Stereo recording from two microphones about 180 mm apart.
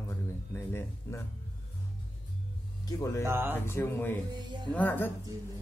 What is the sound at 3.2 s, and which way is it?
Speech, 15° right (ahead or behind).